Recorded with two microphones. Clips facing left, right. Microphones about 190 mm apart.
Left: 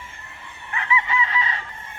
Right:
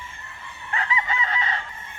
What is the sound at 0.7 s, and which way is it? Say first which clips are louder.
Chicken: left 2 dB; 40° right (ahead or behind).